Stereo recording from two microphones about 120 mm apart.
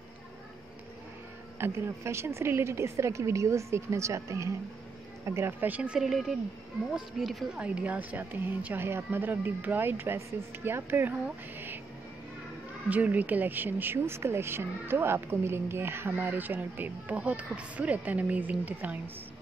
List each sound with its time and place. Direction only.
1.6 s a woman's voice: 20° right (ahead or behind)
11.2 s a sound: 15° right (ahead or behind)
12.9 s speech: 15° right (ahead or behind)